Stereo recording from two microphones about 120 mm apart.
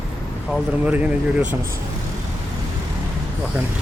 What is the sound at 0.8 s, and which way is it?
Speech, 10° right (ahead or behind).